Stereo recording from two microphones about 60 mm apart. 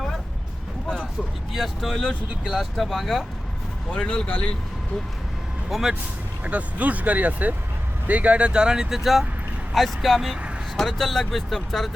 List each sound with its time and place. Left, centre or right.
1.5 s speech: centre
3.9 s speech: centre
6.4 s speech: right; by 11.9 s centre